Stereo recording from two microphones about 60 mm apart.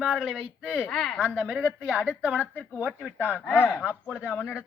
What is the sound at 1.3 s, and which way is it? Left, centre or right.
Speech, right.